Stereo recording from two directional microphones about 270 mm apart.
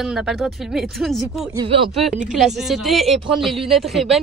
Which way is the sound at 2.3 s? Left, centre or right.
Centre.